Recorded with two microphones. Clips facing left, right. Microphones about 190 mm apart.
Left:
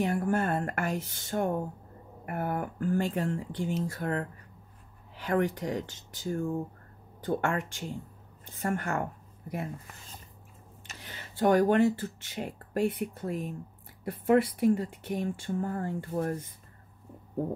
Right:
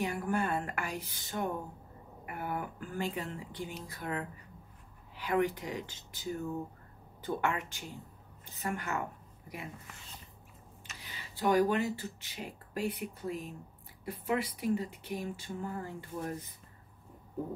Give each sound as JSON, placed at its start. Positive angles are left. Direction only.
{"t": 0.0, "sound": "speech", "side_deg": 45}
{"t": 11.0, "sound": "a sound", "side_deg": 50}
{"t": 12.0, "sound": "speech", "side_deg": 50}